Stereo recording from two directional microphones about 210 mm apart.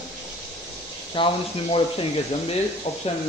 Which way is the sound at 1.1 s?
25° left (ahead or behind).